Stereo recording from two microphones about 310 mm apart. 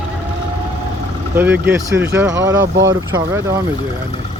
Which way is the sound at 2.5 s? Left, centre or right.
Right.